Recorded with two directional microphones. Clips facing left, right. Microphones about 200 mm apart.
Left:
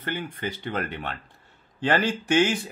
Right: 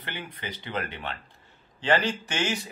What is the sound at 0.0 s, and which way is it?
Speech, 50° left (ahead or behind).